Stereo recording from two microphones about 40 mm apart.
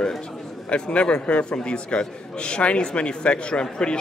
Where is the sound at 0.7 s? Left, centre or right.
Left.